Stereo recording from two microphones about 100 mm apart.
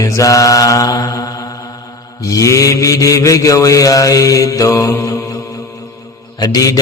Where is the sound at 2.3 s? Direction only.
35° left (ahead or behind).